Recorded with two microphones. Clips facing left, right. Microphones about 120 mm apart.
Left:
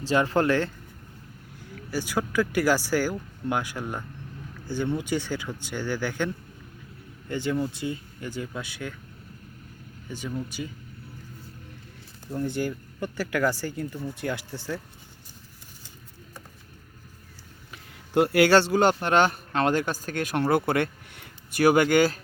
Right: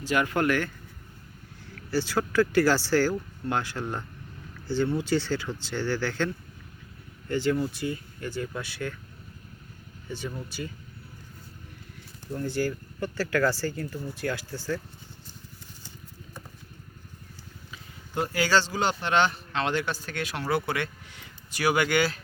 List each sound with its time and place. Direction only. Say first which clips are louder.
0.0 s speech: left 2 dB; 30° left (ahead or behind)
1.7 s speech: right 1 dB; 15° left (ahead or behind)
12.3 s speech: even; 20° left (ahead or behind)
17.7 s speech: left 4 dB; 70° left (ahead or behind); by 22.2 s 45° left (ahead or behind)